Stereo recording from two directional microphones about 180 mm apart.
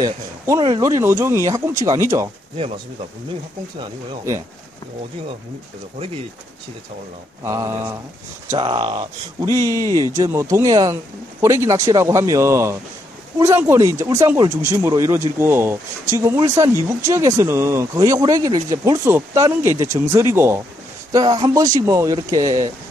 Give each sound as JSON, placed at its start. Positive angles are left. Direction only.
{"t": 0.0, "sound": "speech", "side_deg": -20}
{"t": 7.4, "sound": "speech", "side_deg": -20}